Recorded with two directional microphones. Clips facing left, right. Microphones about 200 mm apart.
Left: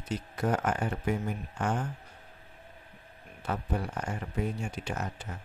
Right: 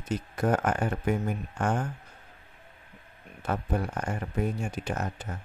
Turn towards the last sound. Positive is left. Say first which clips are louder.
# right 3 dB
turn(degrees=-45)  # may be behind; listen again after turning